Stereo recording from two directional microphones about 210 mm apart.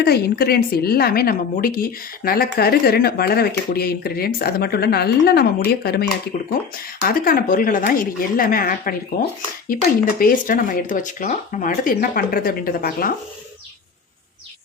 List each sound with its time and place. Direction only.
0.0 s a woman's voice: 50° left (ahead or behind)
10.2 s speech: 40° left (ahead or behind)